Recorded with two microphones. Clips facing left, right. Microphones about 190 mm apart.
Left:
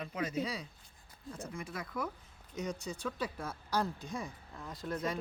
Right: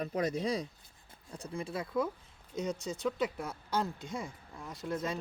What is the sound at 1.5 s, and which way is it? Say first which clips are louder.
Speech: right 8 dB; 30° right (ahead or behind).